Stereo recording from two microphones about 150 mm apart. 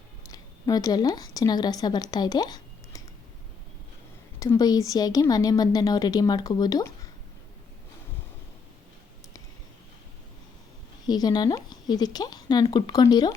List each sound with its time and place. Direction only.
0.3 s a woman's voice: 25° left (ahead or behind)
4.4 s speech: 25° left (ahead or behind)
11.0 s speech: 25° left (ahead or behind)